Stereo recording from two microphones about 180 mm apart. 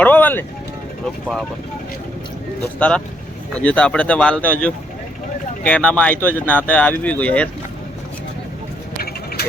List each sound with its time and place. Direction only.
0.0 s vehicle: 10° left (ahead or behind)
2.7 s speech: 5° left (ahead or behind)
5.6 s speech: 5° left (ahead or behind)
9.0 s a sound: 60° left (ahead or behind)